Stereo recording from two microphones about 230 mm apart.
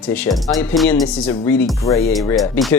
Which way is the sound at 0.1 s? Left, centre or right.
Centre.